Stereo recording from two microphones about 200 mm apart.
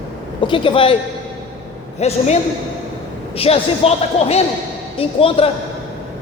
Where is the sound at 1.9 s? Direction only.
35° left (ahead or behind).